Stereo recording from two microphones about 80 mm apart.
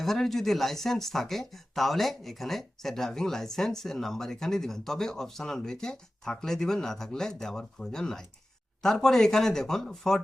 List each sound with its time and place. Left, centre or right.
0.0 s speech: centre